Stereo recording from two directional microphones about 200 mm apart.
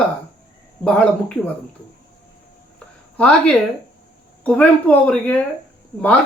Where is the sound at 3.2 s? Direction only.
5° left (ahead or behind).